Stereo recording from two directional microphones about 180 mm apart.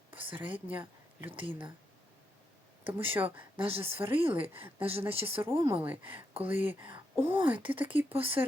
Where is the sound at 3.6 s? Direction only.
30° right (ahead or behind).